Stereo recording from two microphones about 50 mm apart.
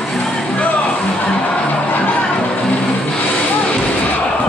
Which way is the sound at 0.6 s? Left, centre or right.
Left.